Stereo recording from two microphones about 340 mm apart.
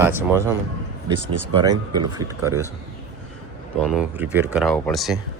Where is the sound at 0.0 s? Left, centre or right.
Centre.